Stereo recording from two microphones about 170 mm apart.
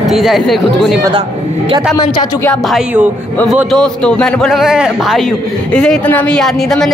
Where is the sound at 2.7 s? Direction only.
10° right (ahead or behind).